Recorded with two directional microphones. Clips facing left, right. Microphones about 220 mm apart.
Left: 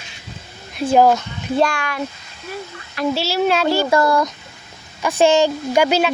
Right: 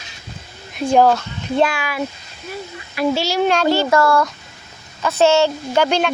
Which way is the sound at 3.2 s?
5° left (ahead or behind).